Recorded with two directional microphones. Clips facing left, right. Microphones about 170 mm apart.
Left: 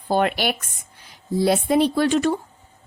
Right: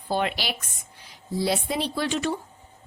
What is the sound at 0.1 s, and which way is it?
A woman's voice, 50° left (ahead or behind).